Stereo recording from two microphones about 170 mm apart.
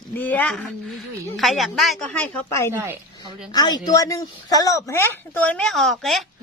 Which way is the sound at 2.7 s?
10° right (ahead or behind).